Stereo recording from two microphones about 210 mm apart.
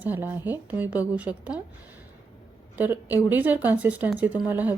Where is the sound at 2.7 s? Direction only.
10° right (ahead or behind).